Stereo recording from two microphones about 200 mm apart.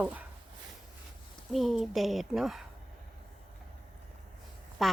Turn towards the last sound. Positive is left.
turn(degrees=0)  # may be behind; listen again after turning